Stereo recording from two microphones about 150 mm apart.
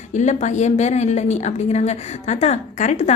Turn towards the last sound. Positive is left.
turn(degrees=50)  # may be behind; listen again after turning